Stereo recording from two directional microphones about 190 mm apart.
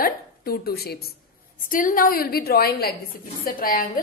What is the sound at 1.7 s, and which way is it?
A woman's voice, 45° left (ahead or behind).